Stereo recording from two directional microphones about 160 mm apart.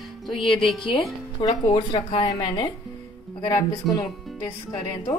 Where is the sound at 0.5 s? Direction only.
Centre (ahead or behind).